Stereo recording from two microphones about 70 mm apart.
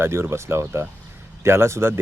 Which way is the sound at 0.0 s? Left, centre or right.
Right.